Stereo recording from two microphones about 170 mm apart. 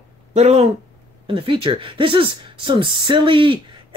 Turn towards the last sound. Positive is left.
turn(degrees=-30)  # may be behind; listen again after turning